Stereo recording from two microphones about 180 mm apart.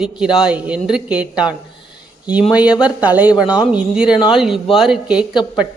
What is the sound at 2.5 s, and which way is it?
Speech, 5° right (ahead or behind).